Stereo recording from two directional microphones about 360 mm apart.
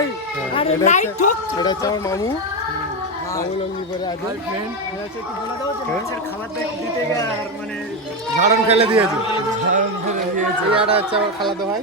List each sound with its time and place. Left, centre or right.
0.5 s speech: centre
8.4 s speech: centre